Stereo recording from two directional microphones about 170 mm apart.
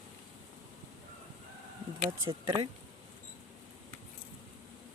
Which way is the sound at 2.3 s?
20° right (ahead or behind).